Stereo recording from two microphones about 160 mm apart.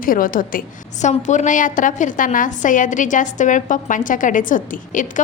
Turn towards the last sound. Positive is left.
turn(degrees=55)  # may be behind; listen again after turning